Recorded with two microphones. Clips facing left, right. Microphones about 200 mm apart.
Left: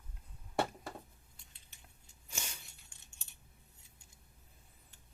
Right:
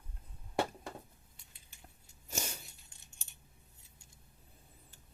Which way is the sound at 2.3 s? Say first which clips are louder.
Right 7 dB; 40° right (ahead or behind).